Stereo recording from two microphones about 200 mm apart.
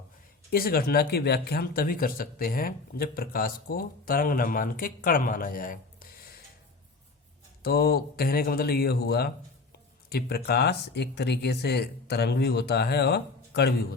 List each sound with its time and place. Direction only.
0.5 s speech: 50° left (ahead or behind)
7.6 s speech: 50° left (ahead or behind)